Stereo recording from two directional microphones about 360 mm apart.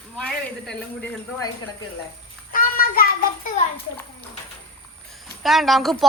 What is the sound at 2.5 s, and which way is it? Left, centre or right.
Child singing, left.